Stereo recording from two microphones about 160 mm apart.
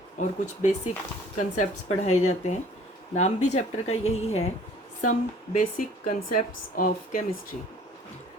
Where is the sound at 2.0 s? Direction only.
45° left (ahead or behind).